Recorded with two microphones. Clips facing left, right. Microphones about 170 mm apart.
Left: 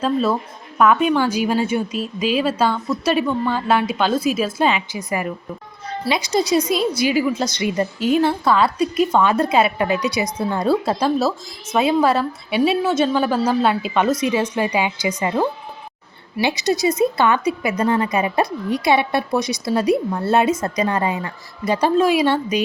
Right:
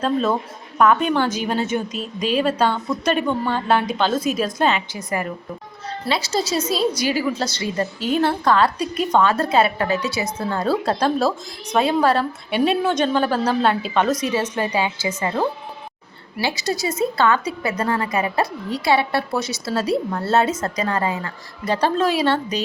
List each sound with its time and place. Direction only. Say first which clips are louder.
0.0 s a woman's voice: left 1 dB; 5° left (ahead or behind)
16.4 s a woman's voice: left 5 dB; 20° left (ahead or behind)